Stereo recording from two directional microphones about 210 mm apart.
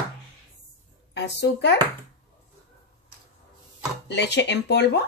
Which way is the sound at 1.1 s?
55° left (ahead or behind).